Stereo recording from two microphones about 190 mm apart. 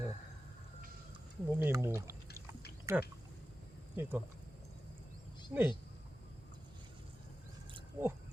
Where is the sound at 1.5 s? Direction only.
10° right (ahead or behind).